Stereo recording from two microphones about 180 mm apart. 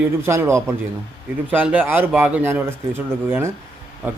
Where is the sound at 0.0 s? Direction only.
15° right (ahead or behind).